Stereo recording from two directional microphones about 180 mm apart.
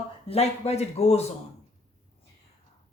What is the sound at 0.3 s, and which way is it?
Speech, 35° left (ahead or behind).